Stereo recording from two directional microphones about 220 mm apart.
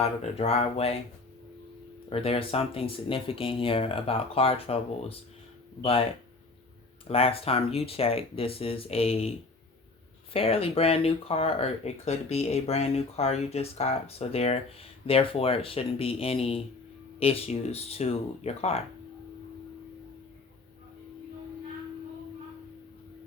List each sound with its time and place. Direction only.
0.0 s speech: 30° left (ahead or behind)
2.0 s speech: 25° left (ahead or behind)
7.1 s speech: 25° left (ahead or behind)
10.3 s speech: 25° left (ahead or behind)